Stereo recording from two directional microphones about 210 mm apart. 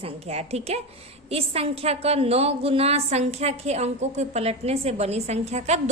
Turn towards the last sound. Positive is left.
turn(degrees=-30)  # may be behind; listen again after turning